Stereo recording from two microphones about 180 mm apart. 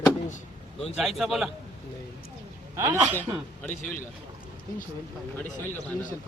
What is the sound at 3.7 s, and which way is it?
Speech, 45° left (ahead or behind).